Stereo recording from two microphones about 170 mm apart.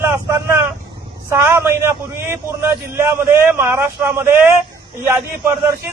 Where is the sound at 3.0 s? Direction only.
15° right (ahead or behind).